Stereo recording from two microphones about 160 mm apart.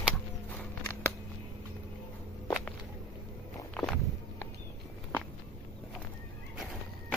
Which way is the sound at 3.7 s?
5° left (ahead or behind).